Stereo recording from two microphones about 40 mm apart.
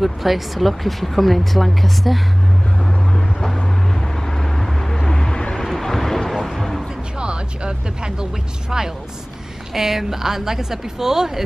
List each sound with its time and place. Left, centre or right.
0.0 s speech: centre
3.1 s vehicle: centre
7.2 s a sound: right
9.8 s a woman's voice: centre